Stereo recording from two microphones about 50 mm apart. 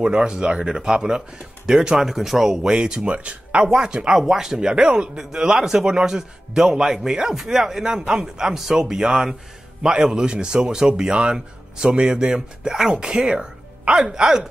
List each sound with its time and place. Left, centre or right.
0.0 s speech: centre
2.0 s speech: centre; by 3.6 s right
3.6 s speech: centre